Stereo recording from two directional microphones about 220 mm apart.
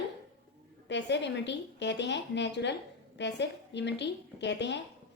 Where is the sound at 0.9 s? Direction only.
55° left (ahead or behind).